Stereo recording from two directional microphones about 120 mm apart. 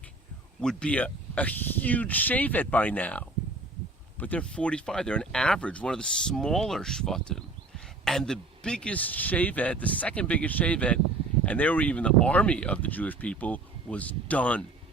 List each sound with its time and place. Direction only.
0.6 s speech: 5° left (ahead or behind)